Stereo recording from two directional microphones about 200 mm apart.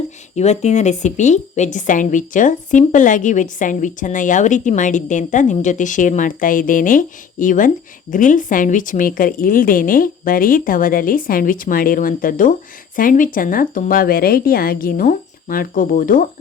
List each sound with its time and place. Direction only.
0.3 s a woman's voice: 35° left (ahead or behind)